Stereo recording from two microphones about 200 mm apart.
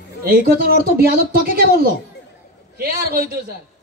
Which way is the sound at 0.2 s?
50° right (ahead or behind).